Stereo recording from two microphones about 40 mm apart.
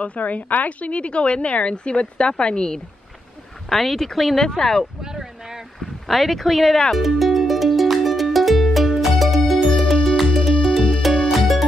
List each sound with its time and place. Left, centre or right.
0.0 s a woman's voice: left
3.6 s speech: centre
5.0 s a sound: centre
6.0 s speech: centre
6.9 s music: centre